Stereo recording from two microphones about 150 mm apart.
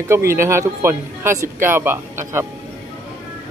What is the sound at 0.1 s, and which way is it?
Speech, 20° right (ahead or behind).